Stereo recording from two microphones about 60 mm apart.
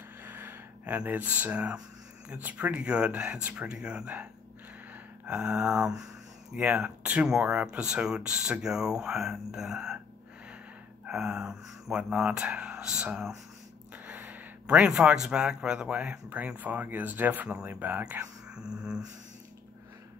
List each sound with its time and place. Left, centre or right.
0.2 s gasp: right
0.9 s speech: right; by 9.9 s centre
11.1 s speech: centre
13.9 s a sound: right
14.7 s speech: centre; by 18.2 s right
18.5 s speech: centre